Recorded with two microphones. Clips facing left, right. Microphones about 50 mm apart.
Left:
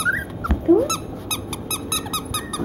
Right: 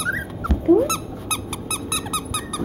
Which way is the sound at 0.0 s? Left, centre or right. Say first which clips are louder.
Left 3 dB; centre.